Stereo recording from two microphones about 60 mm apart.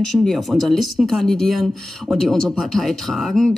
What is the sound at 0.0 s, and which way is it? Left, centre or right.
Speech, centre.